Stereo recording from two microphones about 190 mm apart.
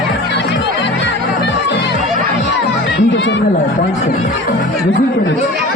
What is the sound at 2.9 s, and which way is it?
Chatter, 70° left (ahead or behind).